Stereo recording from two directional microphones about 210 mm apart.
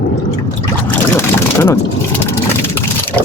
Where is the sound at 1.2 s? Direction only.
10° left (ahead or behind).